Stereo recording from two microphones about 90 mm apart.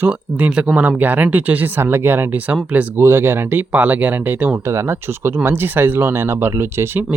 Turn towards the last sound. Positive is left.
turn(degrees=-20)  # may be behind; listen again after turning